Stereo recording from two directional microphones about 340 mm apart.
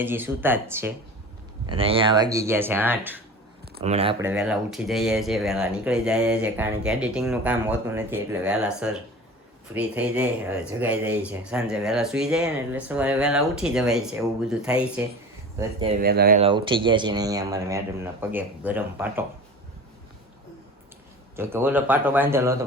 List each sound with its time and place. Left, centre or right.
0.0 s speech: centre
3.8 s speech: centre
4.2 s speech: centre
16.0 s speech: right; by 19.2 s centre
21.3 s speech: centre